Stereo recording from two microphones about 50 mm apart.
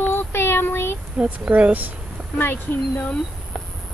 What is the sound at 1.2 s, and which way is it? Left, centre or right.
Speech, right.